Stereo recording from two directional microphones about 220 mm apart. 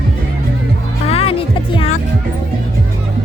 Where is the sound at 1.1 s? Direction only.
25° left (ahead or behind).